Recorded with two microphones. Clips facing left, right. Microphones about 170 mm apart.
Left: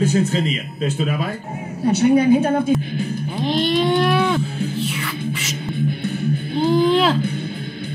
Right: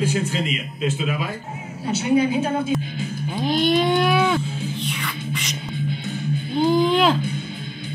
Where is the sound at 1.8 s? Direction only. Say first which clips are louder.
Left 6 dB; 55° left (ahead or behind).